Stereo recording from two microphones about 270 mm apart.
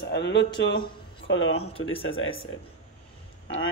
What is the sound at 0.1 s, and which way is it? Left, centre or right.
Speech, left.